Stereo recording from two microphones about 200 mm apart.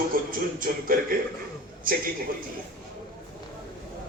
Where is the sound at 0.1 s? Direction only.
45° right (ahead or behind).